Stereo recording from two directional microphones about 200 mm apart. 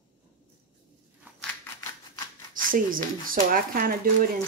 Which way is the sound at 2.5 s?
45° right (ahead or behind).